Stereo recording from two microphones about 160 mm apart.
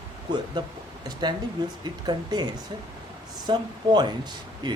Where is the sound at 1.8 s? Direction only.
25° right (ahead or behind).